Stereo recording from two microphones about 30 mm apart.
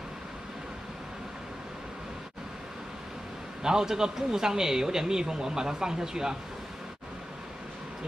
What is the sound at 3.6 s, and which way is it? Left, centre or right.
Speech, centre.